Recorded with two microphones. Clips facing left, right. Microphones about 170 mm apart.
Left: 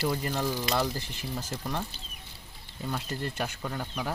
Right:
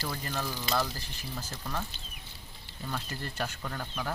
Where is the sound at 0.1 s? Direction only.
15° left (ahead or behind).